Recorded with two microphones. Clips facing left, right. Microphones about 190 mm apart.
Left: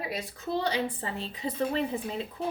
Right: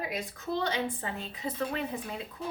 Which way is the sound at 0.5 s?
35° left (ahead or behind).